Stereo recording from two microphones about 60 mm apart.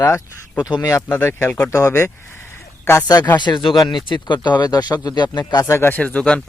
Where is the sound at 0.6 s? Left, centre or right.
Left.